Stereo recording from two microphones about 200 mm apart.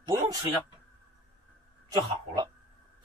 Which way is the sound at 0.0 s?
15° right (ahead or behind).